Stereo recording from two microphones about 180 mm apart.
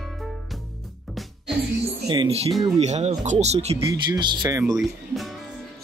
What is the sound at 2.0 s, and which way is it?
Speech, 25° right (ahead or behind).